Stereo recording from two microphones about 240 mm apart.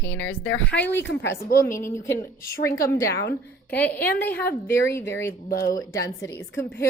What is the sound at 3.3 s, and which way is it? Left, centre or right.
A woman's voice, centre.